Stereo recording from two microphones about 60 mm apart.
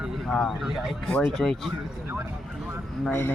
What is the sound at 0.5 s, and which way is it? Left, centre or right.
Speech, centre.